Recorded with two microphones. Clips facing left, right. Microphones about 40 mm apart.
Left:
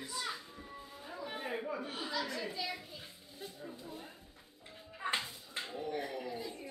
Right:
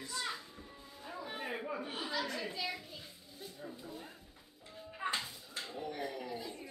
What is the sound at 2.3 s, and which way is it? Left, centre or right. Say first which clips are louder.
Speech: even; centre.